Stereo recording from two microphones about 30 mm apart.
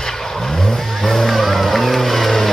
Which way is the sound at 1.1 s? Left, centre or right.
Centre.